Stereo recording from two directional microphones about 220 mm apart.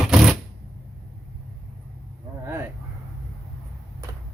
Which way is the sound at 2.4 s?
10° right (ahead or behind).